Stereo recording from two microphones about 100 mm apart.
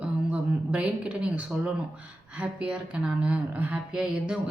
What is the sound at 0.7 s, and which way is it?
Speech, 10° right (ahead or behind).